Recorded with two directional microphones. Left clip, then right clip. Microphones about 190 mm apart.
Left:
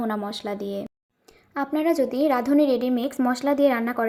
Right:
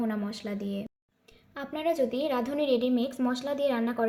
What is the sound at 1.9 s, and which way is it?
Speech, 15° left (ahead or behind).